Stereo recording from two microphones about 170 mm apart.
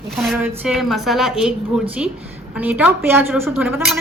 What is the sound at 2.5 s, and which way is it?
A woman's voice, 10° right (ahead or behind).